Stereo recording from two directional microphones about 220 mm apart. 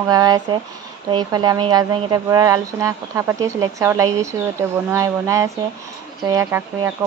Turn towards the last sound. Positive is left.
turn(degrees=-15)  # may be behind; listen again after turning